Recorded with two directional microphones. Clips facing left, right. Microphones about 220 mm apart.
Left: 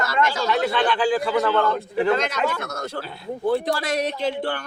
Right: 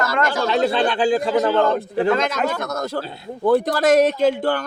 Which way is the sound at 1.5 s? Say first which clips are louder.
Right 3 dB; 40° right (ahead or behind).